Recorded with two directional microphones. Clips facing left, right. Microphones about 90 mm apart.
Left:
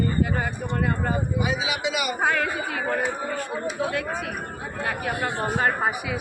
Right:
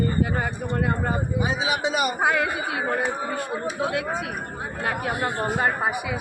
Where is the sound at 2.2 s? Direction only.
15° right (ahead or behind).